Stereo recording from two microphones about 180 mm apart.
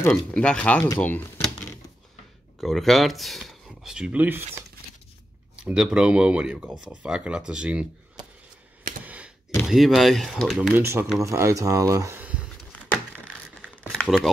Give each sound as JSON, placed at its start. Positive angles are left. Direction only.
{"t": 0.3, "sound": "speech", "side_deg": 5}
{"t": 2.6, "sound": "speech", "side_deg": 0}
{"t": 5.6, "sound": "speech", "side_deg": -5}
{"t": 9.0, "sound": "a sound", "side_deg": -10}
{"t": 9.7, "sound": "speech", "side_deg": 0}
{"t": 10.8, "sound": "speech", "side_deg": -10}
{"t": 12.9, "sound": "a sound", "side_deg": 5}